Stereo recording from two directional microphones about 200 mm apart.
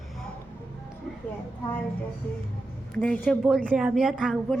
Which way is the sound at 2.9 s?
5° left (ahead or behind).